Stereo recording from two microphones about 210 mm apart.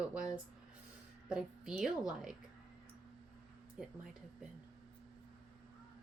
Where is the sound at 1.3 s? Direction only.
5° right (ahead or behind).